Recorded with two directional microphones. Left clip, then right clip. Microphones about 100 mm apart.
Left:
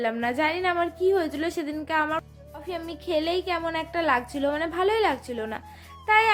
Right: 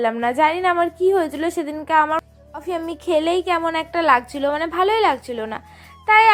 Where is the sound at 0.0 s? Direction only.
30° right (ahead or behind).